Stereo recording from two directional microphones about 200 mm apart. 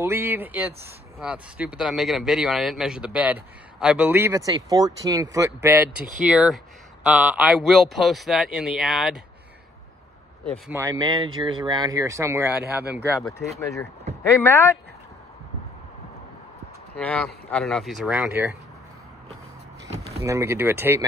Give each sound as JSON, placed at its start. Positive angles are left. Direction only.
{"t": 0.0, "sound": "speech", "side_deg": -10}
{"t": 10.7, "sound": "speech", "side_deg": -15}
{"t": 13.3, "sound": "speech", "side_deg": 15}
{"t": 16.9, "sound": "speech", "side_deg": 5}
{"t": 20.2, "sound": "speech", "side_deg": -15}